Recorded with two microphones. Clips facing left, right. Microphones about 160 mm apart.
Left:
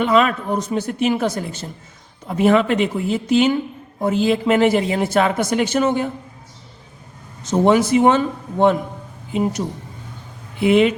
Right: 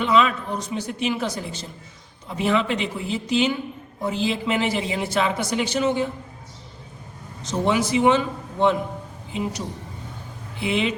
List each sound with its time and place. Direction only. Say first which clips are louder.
0.0 s a man's voice: left 3 dB; 50° left (ahead or behind)
7.4 s a man's voice: left 7 dB; 50° left (ahead or behind)